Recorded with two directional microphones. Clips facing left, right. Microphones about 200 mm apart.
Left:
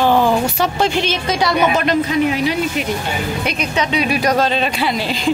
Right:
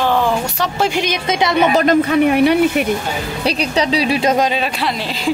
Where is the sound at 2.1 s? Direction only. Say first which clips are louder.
Right 5 dB; 60° right (ahead or behind).